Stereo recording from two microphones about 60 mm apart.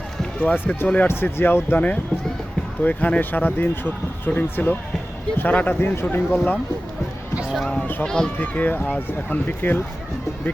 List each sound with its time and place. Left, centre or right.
0.3 s speech: left
1.7 s speech: left
8.0 s speech: centre
8.4 s speech: left